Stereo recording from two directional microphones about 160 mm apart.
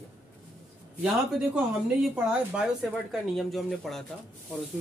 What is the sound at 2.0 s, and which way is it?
A man's voice, 5° right (ahead or behind).